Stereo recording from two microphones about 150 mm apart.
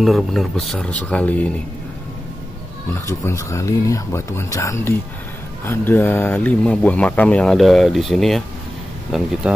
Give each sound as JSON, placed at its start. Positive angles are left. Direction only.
{"t": 0.0, "sound": "speech", "side_deg": 0}
{"t": 2.9, "sound": "speech", "side_deg": 20}